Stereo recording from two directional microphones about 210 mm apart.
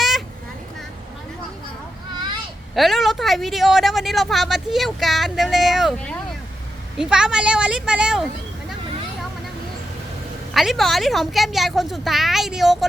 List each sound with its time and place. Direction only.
2.1 s a sound: 20° right (ahead or behind)
2.7 s speech: centre (ahead or behind)
10.5 s speech: centre (ahead or behind)